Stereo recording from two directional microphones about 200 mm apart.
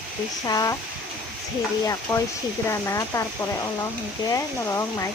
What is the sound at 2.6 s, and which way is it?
Speech, 15° left (ahead or behind).